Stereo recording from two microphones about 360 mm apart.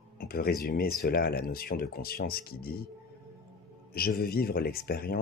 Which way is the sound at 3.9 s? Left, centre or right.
Left.